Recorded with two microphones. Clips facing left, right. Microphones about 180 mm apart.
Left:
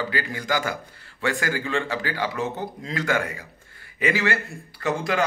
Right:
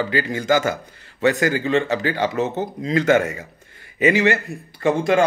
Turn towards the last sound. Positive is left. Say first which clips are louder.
# right 7 dB
turn(degrees=-25)  # may be behind; listen again after turning